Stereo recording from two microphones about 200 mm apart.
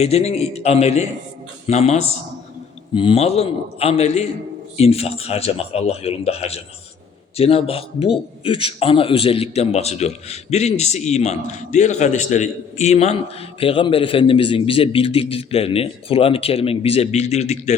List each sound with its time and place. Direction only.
0.0 s a man's voice: 30° left (ahead or behind)